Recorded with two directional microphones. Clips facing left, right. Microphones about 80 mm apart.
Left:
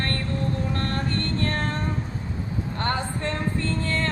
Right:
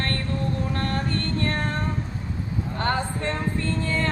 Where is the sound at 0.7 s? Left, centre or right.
Centre.